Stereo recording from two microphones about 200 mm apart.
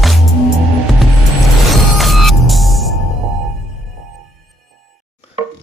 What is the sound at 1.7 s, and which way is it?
Music, centre (ahead or behind).